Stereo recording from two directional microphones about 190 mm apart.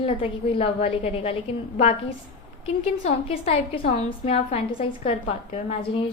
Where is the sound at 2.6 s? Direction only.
35° left (ahead or behind).